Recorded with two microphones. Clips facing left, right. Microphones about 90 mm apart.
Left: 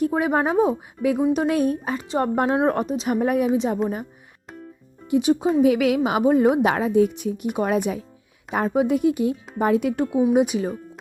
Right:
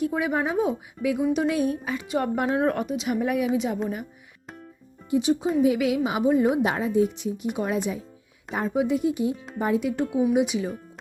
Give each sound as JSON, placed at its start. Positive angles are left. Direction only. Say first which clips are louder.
{"t": 0.0, "sound": "a woman's voice", "louder": "left 4 dB", "side_deg": 45}
{"t": 5.1, "sound": "a woman's voice", "louder": "left 3 dB", "side_deg": 55}
{"t": 6.7, "sound": "a woman's voice", "louder": "left 4 dB", "side_deg": 65}
{"t": 10.3, "sound": "speech", "louder": "left 4 dB", "side_deg": 45}